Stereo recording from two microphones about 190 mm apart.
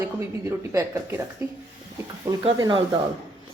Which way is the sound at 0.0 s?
15° right (ahead or behind).